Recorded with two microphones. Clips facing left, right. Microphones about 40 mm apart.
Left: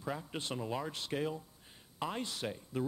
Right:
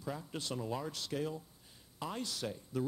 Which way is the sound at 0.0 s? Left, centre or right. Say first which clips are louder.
Left 2 dB; left.